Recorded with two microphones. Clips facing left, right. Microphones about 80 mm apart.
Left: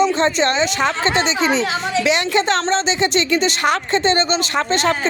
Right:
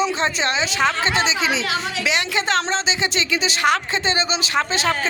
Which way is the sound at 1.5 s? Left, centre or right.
Left.